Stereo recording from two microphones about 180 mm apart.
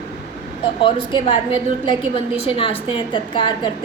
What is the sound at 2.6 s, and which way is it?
Speech, 30° left (ahead or behind).